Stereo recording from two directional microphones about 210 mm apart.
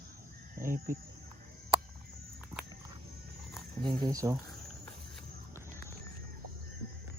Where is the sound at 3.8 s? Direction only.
20° right (ahead or behind).